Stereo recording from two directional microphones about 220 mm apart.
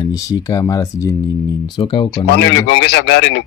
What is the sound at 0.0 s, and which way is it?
Speech, 15° left (ahead or behind).